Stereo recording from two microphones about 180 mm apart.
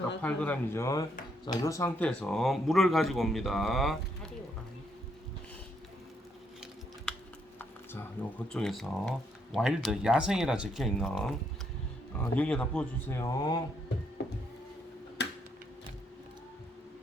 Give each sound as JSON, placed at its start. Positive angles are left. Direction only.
{"t": 0.2, "sound": "speech", "side_deg": 10}
{"t": 7.1, "sound": "typing", "side_deg": 5}
{"t": 8.2, "sound": "speech", "side_deg": 10}